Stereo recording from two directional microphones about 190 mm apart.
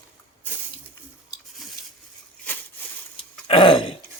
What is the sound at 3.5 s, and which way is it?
Burping, 25° left (ahead or behind).